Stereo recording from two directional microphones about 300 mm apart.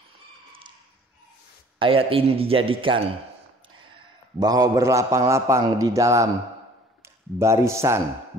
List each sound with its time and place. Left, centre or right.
1.8 s a man's voice: centre
4.4 s a man's voice: centre
7.3 s a man's voice: centre